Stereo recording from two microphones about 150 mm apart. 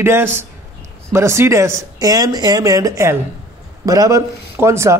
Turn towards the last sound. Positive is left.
turn(degrees=-20)  # may be behind; listen again after turning